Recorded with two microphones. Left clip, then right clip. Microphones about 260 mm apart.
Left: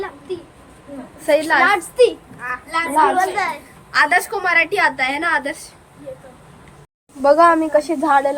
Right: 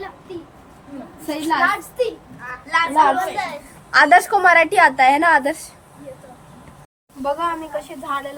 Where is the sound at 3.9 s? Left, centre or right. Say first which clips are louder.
Right 4 dB; centre.